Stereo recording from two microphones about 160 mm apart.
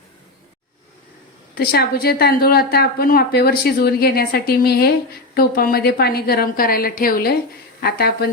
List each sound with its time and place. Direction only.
1.5 s a woman's voice: 75° left (ahead or behind)